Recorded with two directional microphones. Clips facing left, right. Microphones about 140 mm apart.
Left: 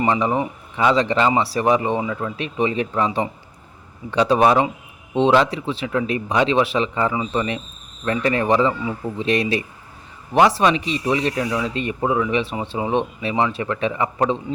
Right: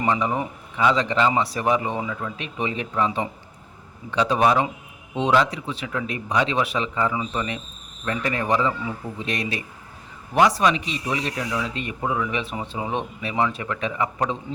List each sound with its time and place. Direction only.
0.0 s a man's voice: 35° left (ahead or behind)